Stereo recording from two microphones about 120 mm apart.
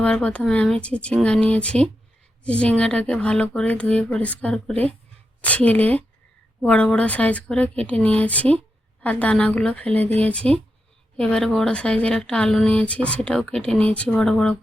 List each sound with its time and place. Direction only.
0.0 s speech: 10° left (ahead or behind)